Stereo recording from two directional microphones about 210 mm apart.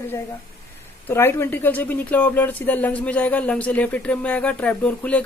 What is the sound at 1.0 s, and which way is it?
Speech, 10° left (ahead or behind).